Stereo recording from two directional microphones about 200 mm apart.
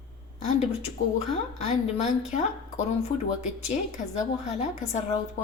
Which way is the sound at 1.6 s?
35° left (ahead or behind).